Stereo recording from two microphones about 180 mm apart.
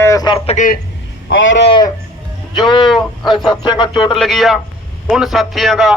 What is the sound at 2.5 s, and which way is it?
Speech, 25° left (ahead or behind).